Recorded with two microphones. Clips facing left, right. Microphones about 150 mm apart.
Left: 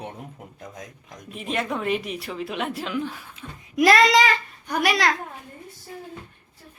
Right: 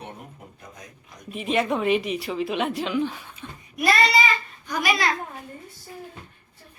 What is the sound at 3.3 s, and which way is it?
A child's voice, 90° left.